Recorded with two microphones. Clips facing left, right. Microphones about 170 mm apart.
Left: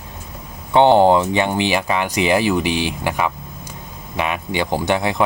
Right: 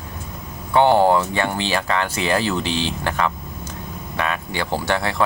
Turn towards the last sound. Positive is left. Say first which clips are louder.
# left 3 dB
turn(degrees=15)  # may be behind; listen again after turning